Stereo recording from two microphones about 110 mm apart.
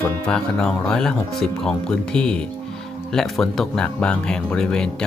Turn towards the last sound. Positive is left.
turn(degrees=5)  # may be behind; listen again after turning